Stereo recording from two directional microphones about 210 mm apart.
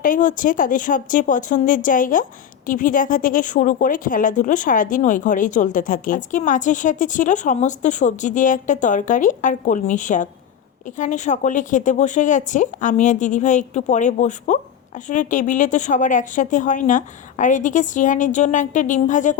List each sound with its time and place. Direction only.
0.0 s speech: 40° left (ahead or behind)